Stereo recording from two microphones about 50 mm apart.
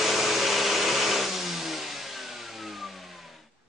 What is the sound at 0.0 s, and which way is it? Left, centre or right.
Vehicle, centre.